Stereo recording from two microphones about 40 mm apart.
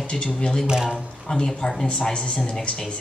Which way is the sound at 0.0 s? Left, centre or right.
Left.